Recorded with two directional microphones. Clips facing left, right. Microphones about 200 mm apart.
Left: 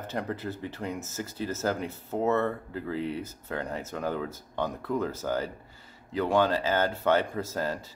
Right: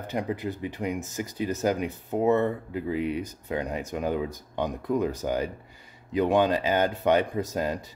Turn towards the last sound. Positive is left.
turn(degrees=-15)  # may be behind; listen again after turning